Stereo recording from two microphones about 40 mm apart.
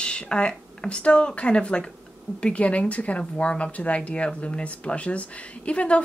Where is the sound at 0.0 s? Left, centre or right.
Left.